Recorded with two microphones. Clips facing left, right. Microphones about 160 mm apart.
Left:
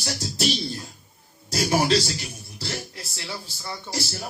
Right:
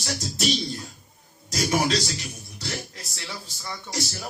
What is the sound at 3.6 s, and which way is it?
Music, 30° left (ahead or behind).